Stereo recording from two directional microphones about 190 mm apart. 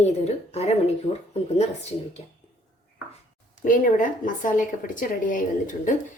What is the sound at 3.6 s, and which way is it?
A woman's voice, 45° left (ahead or behind).